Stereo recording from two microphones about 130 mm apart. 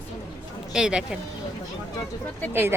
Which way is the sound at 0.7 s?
5° right (ahead or behind).